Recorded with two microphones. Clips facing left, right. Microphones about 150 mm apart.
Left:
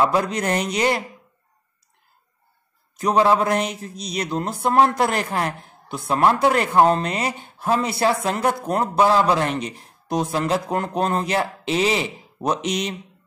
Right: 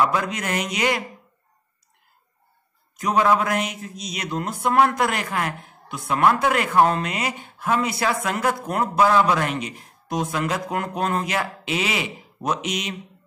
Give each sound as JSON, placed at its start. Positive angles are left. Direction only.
{"t": 0.0, "sound": "mantra", "side_deg": 35}
{"t": 3.0, "sound": "mantra", "side_deg": 30}